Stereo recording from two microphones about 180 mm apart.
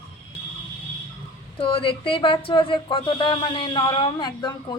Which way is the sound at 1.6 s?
30° left (ahead or behind).